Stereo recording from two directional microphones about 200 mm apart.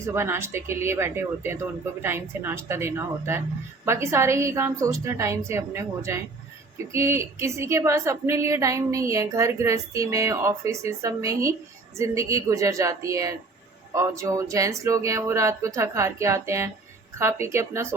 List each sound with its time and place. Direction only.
0.0 s speech: 10° right (ahead or behind)